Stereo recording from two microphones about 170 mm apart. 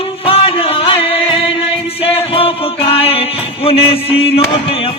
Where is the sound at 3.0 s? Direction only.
35° left (ahead or behind).